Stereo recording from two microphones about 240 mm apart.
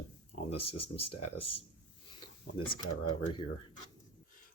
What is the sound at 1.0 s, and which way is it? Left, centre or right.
Speech, left.